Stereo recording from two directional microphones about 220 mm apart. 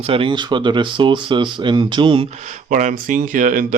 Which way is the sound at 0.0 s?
25° right (ahead or behind).